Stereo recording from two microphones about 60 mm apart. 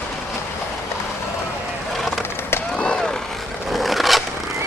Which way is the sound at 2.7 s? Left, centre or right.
Centre.